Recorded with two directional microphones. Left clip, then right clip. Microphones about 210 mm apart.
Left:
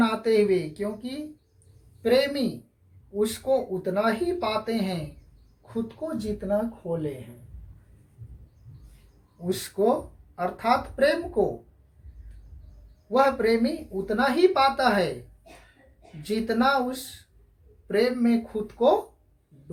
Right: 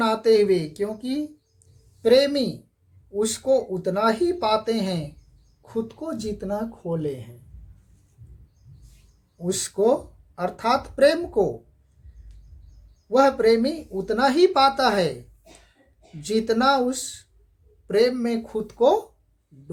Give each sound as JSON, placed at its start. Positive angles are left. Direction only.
{"t": 0.0, "sound": "speech", "side_deg": -50}
{"t": 6.1, "sound": "speech", "side_deg": -55}
{"t": 9.5, "sound": "speech", "side_deg": -50}
{"t": 13.1, "sound": "speech", "side_deg": -50}
{"t": 16.2, "sound": "speech", "side_deg": -50}